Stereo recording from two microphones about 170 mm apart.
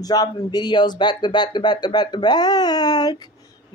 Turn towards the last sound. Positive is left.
turn(degrees=25)  # may be behind; listen again after turning